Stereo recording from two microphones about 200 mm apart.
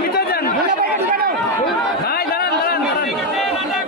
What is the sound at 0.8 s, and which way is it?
Chatter, 50° right (ahead or behind).